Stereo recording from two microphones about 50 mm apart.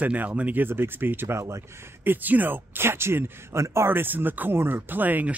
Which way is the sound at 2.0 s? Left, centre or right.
Right.